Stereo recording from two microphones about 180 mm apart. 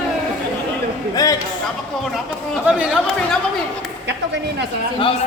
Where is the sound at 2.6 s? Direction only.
5° right (ahead or behind).